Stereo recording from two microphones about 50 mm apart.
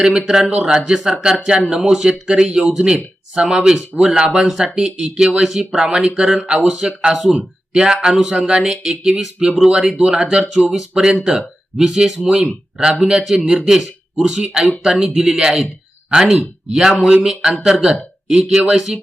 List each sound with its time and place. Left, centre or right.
0.0 s a man's voice: centre